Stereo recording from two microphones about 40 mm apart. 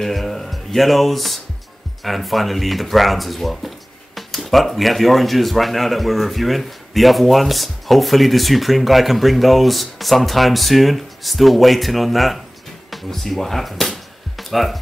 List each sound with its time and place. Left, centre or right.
0.0 s speech: centre